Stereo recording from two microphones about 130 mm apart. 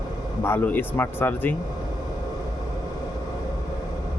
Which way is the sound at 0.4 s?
15° left (ahead or behind).